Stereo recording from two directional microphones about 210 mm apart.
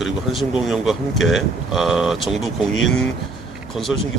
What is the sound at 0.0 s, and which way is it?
A man's voice, centre (ahead or behind).